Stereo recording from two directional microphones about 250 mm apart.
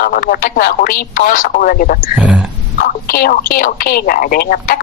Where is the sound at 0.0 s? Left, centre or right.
Left.